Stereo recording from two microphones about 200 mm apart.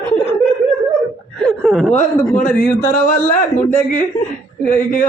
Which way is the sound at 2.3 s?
45° left (ahead or behind).